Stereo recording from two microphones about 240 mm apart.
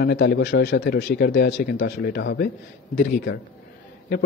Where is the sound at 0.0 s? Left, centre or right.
Left.